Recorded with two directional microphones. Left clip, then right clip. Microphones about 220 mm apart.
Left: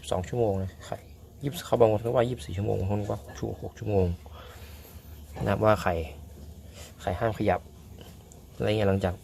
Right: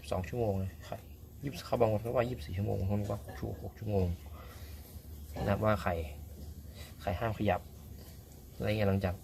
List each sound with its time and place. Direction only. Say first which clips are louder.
0.0 s speech: left 7 dB; 25° left (ahead or behind)
5.5 s speech: left 8 dB; 25° left (ahead or behind)